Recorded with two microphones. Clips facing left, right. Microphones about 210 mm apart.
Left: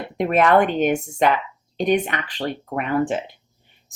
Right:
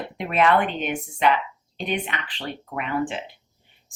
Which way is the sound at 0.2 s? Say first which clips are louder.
Left 4 dB; 45° left (ahead or behind).